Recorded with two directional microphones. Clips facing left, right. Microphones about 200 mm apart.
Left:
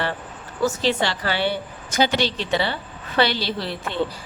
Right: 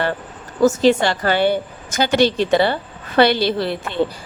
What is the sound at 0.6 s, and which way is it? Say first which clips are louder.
Speech: right 8 dB; 45° right (ahead or behind).